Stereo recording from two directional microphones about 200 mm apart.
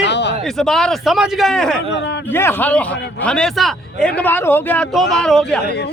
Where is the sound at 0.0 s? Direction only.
60° left (ahead or behind).